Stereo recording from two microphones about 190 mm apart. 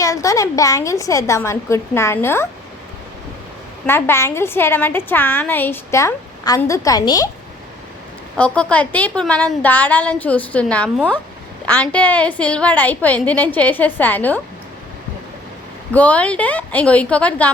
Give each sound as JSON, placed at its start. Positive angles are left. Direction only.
{"t": 0.0, "sound": "a woman's voice", "side_deg": 15}
{"t": 3.8, "sound": "a woman's voice", "side_deg": 10}
{"t": 8.4, "sound": "a woman's voice", "side_deg": 5}
{"t": 15.9, "sound": "a woman's voice", "side_deg": 10}